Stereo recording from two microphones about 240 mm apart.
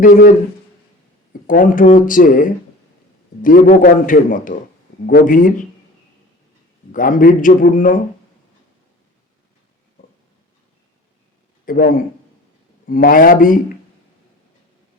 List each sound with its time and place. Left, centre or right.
0.0 s speech: left
6.9 s speech: left
11.6 s speech: left